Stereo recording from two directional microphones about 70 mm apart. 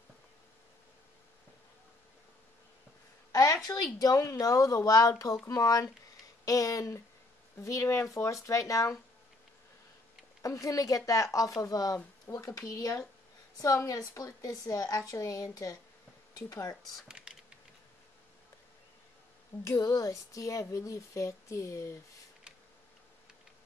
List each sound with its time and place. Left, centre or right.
3.3 s a sound: left
3.6 s speech: left
10.4 s speech: left
17.2 s typing: centre
19.6 s speech: left